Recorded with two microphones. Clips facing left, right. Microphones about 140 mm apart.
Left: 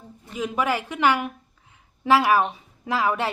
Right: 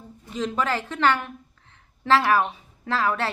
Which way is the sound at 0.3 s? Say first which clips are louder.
Left 1 dB; 10° left (ahead or behind).